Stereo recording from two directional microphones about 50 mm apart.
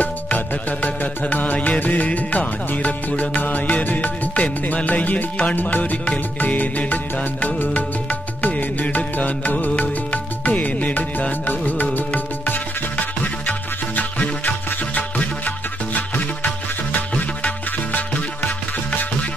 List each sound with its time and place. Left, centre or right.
0.0 s music: left